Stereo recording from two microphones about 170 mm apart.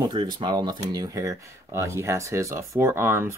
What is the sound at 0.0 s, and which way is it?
Speech, 25° right (ahead or behind).